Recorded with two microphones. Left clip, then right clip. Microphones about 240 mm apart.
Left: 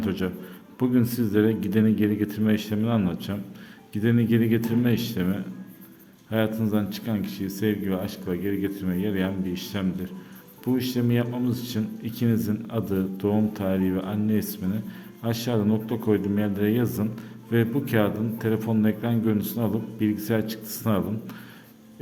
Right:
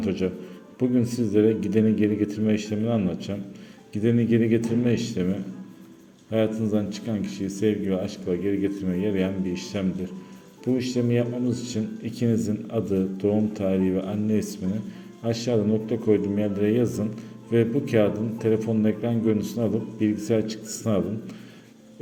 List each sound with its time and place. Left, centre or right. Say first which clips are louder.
0.0 s a man's voice: right 2 dB; centre